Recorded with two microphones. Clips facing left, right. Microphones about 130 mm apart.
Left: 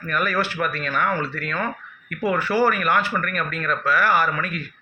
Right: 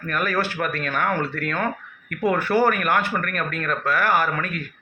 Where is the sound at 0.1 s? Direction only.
45° right (ahead or behind).